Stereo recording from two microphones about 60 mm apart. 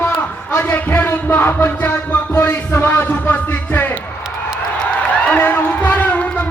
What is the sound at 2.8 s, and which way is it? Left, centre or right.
Music, left.